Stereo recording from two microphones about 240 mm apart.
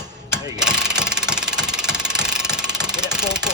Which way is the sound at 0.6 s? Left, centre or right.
Centre.